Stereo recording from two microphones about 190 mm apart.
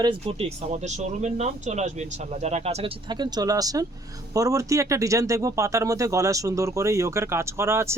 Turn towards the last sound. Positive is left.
turn(degrees=-15)  # may be behind; listen again after turning